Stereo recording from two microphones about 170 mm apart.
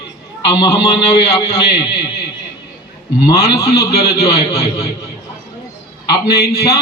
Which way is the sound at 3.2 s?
20° left (ahead or behind).